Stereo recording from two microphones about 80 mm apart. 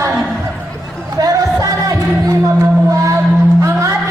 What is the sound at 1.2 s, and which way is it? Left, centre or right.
Music, right.